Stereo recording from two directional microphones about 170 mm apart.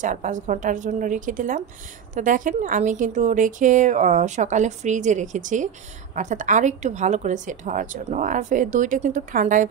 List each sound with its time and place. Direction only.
0.0 s a woman's voice: 50° right (ahead or behind)